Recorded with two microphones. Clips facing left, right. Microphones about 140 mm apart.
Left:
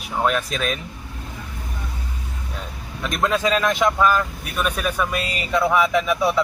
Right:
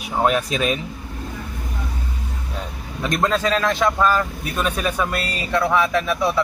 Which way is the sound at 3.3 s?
15° left (ahead or behind).